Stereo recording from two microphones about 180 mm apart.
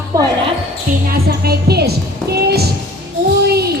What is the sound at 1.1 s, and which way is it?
Speech, 60° right (ahead or behind).